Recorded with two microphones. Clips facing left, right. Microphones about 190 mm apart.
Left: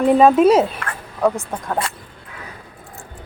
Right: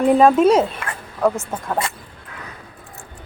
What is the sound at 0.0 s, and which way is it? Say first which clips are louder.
Speech: left 1 dB; centre (ahead or behind).